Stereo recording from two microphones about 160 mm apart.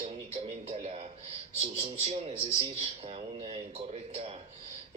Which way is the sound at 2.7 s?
40° right (ahead or behind).